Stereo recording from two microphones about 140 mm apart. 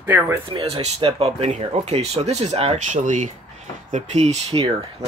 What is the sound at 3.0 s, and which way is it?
Speech, 60° right (ahead or behind).